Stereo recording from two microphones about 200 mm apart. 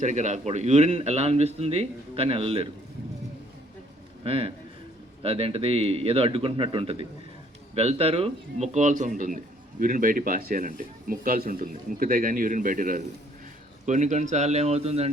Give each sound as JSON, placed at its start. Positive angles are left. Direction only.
{"t": 0.0, "sound": "a man's voice", "side_deg": -35}
{"t": 4.2, "sound": "a man's voice", "side_deg": -25}